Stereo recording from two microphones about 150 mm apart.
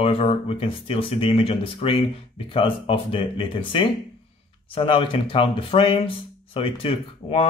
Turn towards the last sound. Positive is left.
turn(degrees=40)  # may be behind; listen again after turning